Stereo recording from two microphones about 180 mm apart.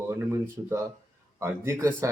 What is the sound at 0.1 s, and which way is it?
Speech, 15° right (ahead or behind).